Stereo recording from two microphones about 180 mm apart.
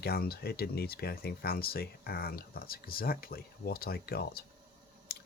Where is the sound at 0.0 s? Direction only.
60° left (ahead or behind).